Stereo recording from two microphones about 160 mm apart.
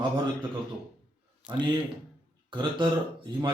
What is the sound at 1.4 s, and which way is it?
Speech, 5° right (ahead or behind).